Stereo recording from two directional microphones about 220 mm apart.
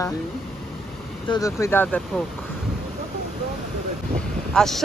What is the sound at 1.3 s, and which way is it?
Speech, 15° left (ahead or behind).